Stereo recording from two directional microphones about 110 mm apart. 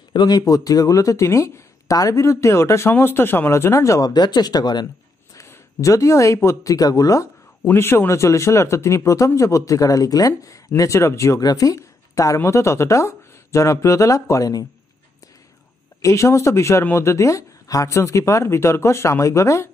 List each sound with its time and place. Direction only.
0.1 s speech: 40° left (ahead or behind)
7.6 s speech: 20° left (ahead or behind)
16.0 s speech: 25° left (ahead or behind)